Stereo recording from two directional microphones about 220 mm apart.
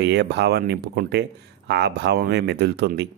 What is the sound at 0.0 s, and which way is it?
Speech, 50° right (ahead or behind).